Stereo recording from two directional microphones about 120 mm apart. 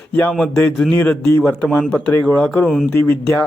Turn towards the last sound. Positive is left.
turn(degrees=15)  # may be behind; listen again after turning